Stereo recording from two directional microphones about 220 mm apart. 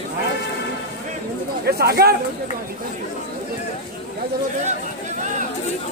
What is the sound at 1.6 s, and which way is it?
Speech, 45° right (ahead or behind).